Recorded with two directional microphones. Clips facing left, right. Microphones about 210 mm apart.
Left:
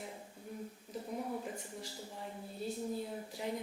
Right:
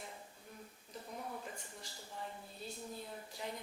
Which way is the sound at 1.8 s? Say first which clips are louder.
Left 3 dB; 5° left (ahead or behind).